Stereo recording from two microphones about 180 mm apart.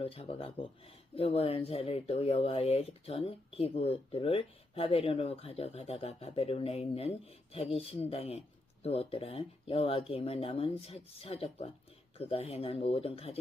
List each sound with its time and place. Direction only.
0.0 s speech: 30° left (ahead or behind)